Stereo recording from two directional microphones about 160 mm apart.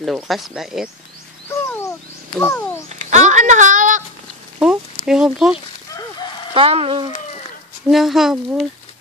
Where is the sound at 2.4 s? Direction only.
15° left (ahead or behind).